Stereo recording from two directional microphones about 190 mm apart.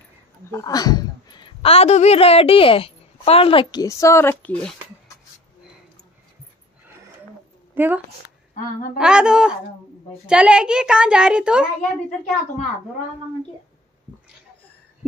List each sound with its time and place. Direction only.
0.5 s a woman's voice: 15° left (ahead or behind)
3.8 s speech: 15° left (ahead or behind)
7.7 s a woman's voice: 10° right (ahead or behind)